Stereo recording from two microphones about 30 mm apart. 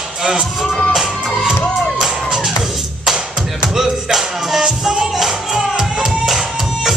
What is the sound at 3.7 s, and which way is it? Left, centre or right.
Music, centre.